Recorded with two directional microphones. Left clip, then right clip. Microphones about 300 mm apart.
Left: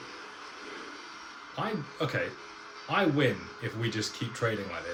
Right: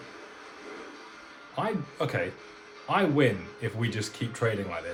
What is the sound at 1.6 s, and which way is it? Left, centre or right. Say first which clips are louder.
Speech: right 2 dB; centre.